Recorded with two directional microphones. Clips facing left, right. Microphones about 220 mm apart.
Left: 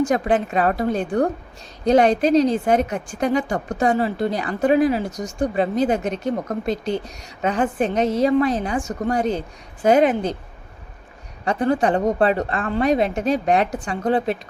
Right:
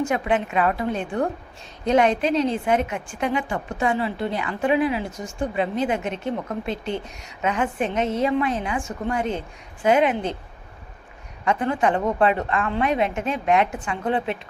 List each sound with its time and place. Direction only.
0.1 s a woman's voice: 35° left (ahead or behind)
11.4 s a woman's voice: 35° left (ahead or behind)